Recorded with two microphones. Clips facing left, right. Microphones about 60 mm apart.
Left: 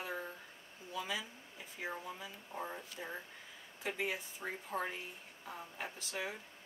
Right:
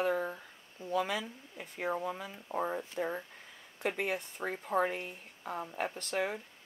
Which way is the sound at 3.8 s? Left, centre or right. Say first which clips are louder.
Right 5 dB; right.